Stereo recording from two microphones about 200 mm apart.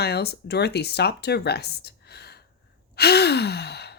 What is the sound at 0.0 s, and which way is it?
Speech, 55° left (ahead or behind).